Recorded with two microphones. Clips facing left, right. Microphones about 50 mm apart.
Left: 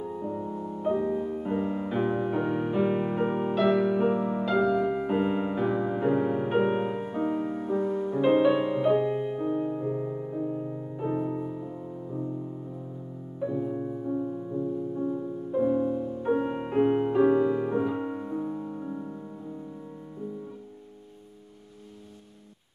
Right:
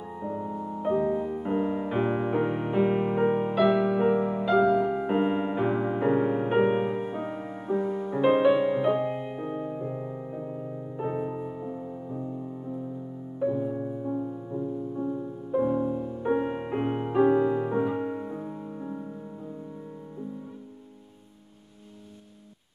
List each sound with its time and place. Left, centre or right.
0.0 s music: right
3.5 s music: centre
3.8 s music: centre
11.0 s music: centre